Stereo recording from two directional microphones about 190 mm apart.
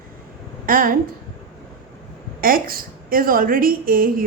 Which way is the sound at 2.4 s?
50° right (ahead or behind).